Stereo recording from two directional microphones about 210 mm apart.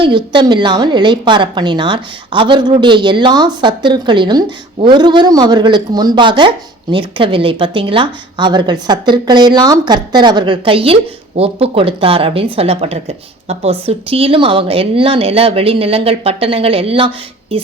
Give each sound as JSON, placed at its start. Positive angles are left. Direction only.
{"t": 0.0, "sound": "a woman's voice", "side_deg": -20}